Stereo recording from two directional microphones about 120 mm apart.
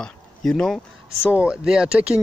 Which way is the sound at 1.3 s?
10° right (ahead or behind).